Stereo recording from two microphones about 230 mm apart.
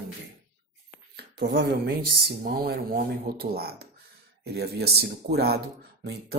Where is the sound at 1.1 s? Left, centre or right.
Right.